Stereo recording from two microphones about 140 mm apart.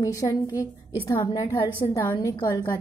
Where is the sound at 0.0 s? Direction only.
25° left (ahead or behind).